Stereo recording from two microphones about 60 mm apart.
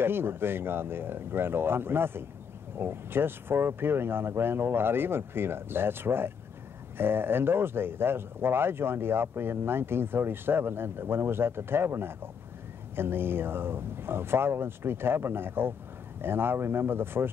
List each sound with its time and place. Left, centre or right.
0.0 s speech: right